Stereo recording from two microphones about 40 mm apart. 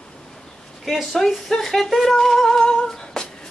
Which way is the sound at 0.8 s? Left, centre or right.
Centre.